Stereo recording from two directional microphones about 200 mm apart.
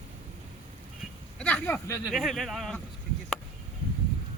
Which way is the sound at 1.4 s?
5° left (ahead or behind).